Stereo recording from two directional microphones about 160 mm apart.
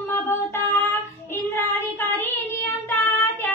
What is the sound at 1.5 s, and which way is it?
Child singing, 15° left (ahead or behind).